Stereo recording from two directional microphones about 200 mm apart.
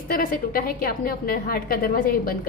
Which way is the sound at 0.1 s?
45° left (ahead or behind).